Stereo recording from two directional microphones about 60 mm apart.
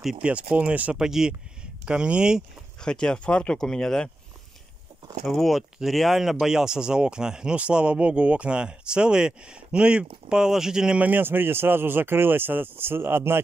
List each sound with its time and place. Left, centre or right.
0.2 s speech: right
0.9 s speech: centre
2.8 s speech: centre
5.2 s speech: centre
11.0 s speech: right